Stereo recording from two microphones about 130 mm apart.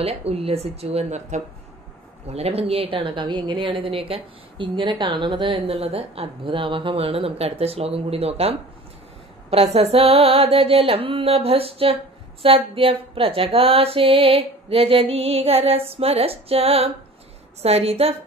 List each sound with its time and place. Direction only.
0.0 s a woman's voice: 50° right (ahead or behind)